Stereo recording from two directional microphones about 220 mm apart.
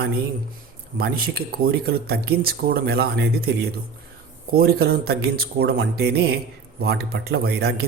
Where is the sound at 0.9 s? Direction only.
45° right (ahead or behind).